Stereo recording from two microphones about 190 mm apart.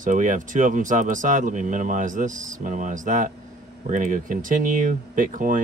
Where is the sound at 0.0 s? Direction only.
40° right (ahead or behind).